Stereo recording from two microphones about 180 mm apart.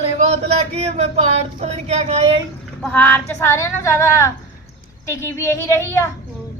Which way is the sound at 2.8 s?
10° left (ahead or behind).